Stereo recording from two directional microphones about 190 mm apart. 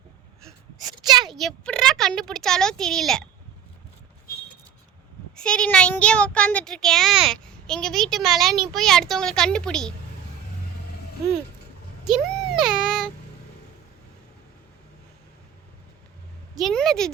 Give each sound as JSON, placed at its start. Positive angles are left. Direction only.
{"t": 0.8, "sound": "a sound", "side_deg": -20}
{"t": 1.3, "sound": "speech", "side_deg": 0}
{"t": 5.4, "sound": "speech", "side_deg": 5}
{"t": 12.0, "sound": "child singing", "side_deg": -5}
{"t": 16.6, "sound": "speech", "side_deg": 0}